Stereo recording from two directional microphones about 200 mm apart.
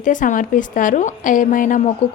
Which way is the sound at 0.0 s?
40° left (ahead or behind).